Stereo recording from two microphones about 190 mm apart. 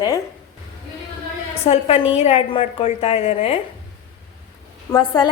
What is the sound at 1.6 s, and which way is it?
Speech, 35° left (ahead or behind).